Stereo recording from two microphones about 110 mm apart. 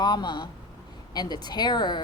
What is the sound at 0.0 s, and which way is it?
Speech, 40° left (ahead or behind).